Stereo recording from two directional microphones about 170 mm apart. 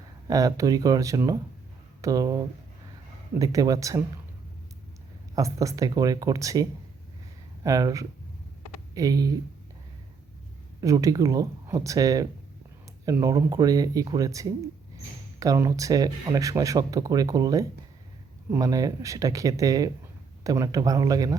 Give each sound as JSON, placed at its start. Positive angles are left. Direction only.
{"t": 0.3, "sound": "speech", "side_deg": -20}
{"t": 5.3, "sound": "speech", "side_deg": -20}
{"t": 10.8, "sound": "speech", "side_deg": -20}